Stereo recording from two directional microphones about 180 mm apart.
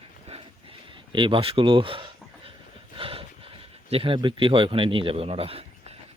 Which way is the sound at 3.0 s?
30° right (ahead or behind).